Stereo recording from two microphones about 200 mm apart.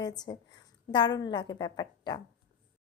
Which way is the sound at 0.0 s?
20° left (ahead or behind).